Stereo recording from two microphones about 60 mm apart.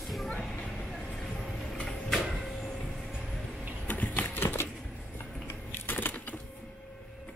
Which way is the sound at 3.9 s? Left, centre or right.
Left.